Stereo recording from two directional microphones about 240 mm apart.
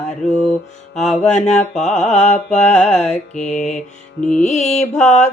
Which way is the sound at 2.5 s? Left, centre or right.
Left.